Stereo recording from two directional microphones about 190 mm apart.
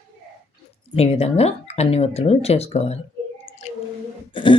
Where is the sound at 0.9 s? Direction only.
30° left (ahead or behind).